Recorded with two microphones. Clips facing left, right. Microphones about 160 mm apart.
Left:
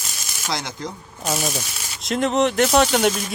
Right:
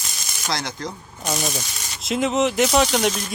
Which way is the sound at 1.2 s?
5° left (ahead or behind).